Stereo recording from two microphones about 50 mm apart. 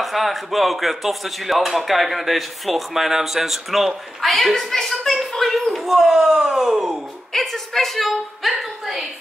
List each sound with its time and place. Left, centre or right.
0.0 s speech: centre
7.3 s a woman's voice: centre